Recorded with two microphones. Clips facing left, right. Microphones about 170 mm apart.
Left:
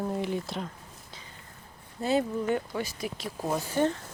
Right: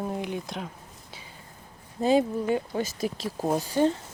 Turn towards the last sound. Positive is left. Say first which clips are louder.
# right 3 dB
turn(degrees=-25)  # may be behind; listen again after turning